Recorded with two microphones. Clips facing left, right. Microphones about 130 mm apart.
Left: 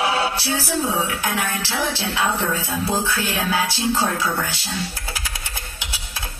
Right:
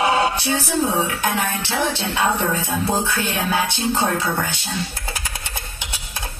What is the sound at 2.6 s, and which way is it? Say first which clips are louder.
Speech: right 2 dB; 15° right (ahead or behind).